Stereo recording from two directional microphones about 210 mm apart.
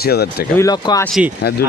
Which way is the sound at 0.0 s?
50° left (ahead or behind).